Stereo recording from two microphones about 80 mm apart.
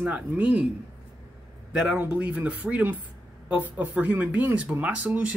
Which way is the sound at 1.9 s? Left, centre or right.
Centre.